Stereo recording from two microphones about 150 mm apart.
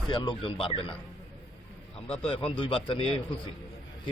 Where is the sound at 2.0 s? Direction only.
35° left (ahead or behind).